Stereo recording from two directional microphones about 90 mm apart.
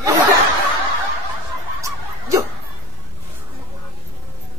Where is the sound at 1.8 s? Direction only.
40° right (ahead or behind).